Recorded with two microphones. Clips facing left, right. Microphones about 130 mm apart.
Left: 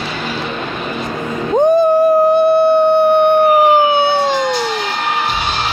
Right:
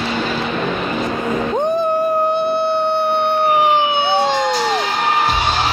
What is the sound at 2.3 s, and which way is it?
Siren, 40° left (ahead or behind).